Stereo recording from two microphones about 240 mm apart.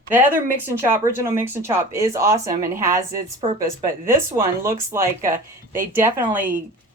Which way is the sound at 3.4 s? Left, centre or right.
Right.